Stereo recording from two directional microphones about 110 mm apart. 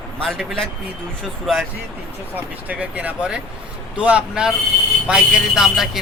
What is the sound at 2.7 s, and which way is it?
A man's voice, 15° right (ahead or behind).